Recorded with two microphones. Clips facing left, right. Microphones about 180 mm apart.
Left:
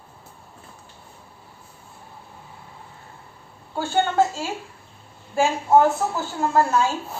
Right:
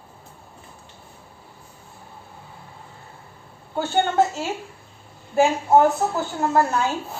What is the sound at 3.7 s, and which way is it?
A woman's voice, 20° right (ahead or behind).